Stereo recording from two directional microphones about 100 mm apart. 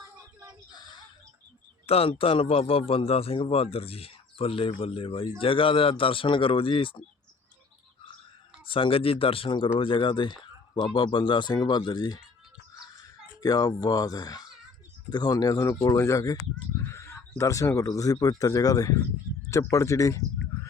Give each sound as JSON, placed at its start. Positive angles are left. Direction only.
{"t": 0.7, "sound": "a sound", "side_deg": 45}
{"t": 1.9, "sound": "a man's voice", "side_deg": 70}
{"t": 8.6, "sound": "speech", "side_deg": 60}
{"t": 13.4, "sound": "speech", "side_deg": 40}
{"t": 16.8, "sound": "a sound", "side_deg": 30}
{"t": 17.8, "sound": "speech", "side_deg": 35}